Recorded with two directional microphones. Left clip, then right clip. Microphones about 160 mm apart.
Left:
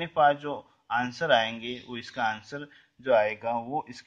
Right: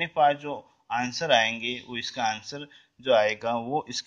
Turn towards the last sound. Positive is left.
turn(degrees=-45)  # may be behind; listen again after turning